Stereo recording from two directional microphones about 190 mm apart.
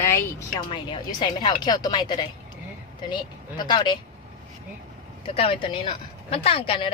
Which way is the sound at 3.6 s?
25° left (ahead or behind).